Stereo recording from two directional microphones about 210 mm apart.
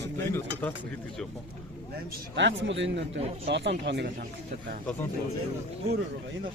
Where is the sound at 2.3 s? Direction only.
60° right (ahead or behind).